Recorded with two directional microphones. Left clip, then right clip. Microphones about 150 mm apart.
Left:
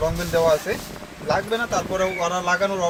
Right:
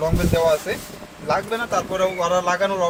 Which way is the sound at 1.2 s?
Centre (ahead or behind).